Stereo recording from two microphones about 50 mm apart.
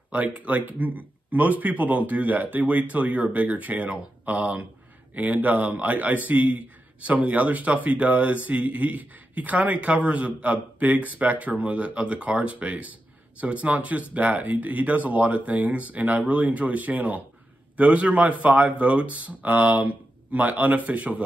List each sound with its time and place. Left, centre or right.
0.1 s a man's voice: right